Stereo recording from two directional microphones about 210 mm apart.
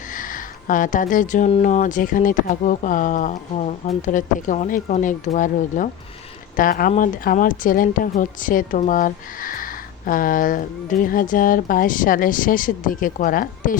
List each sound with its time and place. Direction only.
0.1 s speech: 40° left (ahead or behind)